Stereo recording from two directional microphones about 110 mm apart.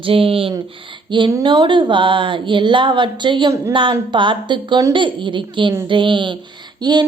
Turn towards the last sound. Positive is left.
turn(degrees=-40)  # may be behind; listen again after turning